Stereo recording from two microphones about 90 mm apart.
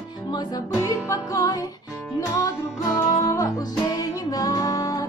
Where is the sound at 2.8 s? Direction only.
40° left (ahead or behind).